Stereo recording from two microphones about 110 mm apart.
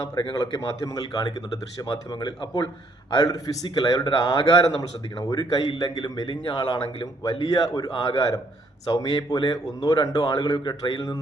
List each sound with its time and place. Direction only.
0.2 s a man's voice: 45° left (ahead or behind)
4.4 s a man's voice: 50° left (ahead or behind)